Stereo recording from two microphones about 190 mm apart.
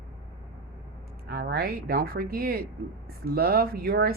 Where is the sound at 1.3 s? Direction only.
55° right (ahead or behind).